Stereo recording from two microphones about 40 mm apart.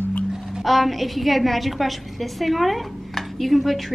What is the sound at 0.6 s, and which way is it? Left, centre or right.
A woman's voice, centre.